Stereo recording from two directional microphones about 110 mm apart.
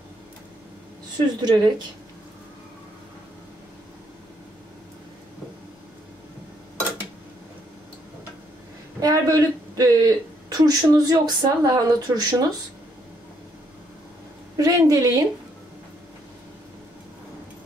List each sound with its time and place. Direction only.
1.4 s a woman's voice: 40° right (ahead or behind)
9.0 s speech: 35° right (ahead or behind)
14.6 s a woman's voice: 30° right (ahead or behind)